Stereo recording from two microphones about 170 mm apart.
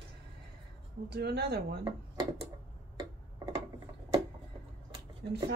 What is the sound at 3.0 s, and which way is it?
Tick-tock, 20° right (ahead or behind).